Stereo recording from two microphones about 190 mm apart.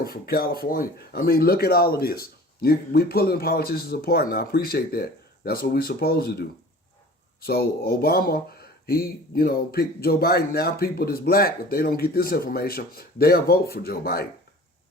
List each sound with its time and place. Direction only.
0.0 s speech: 50° left (ahead or behind)
7.4 s speech: 55° left (ahead or behind)